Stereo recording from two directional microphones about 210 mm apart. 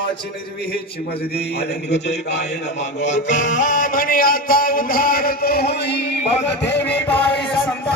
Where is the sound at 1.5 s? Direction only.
55° left (ahead or behind).